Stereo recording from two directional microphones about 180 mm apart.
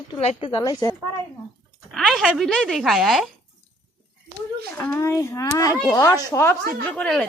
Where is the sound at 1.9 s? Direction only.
Centre (ahead or behind).